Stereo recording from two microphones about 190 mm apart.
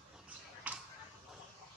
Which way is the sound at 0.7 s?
10° right (ahead or behind).